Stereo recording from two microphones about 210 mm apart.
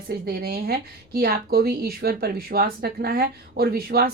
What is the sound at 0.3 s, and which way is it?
Speech, 45° right (ahead or behind).